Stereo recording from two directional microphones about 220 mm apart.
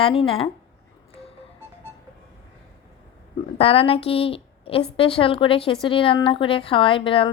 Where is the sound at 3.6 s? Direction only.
25° left (ahead or behind).